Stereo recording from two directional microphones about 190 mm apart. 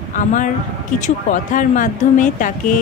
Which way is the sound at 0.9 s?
40° left (ahead or behind).